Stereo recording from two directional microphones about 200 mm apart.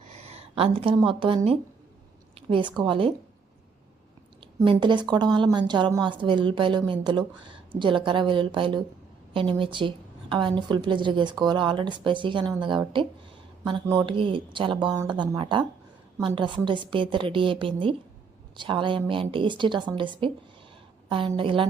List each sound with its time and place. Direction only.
0.1 s a sound: 30° right (ahead or behind)
1.0 s a woman's voice: 25° right (ahead or behind)
4.6 s a woman's voice: 25° right (ahead or behind)